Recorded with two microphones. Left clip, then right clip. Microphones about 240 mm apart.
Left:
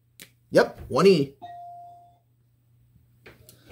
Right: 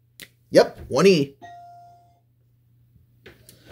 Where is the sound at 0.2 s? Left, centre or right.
Centre.